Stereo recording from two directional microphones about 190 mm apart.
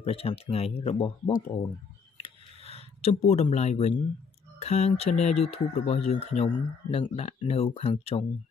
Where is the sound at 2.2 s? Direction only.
30° left (ahead or behind).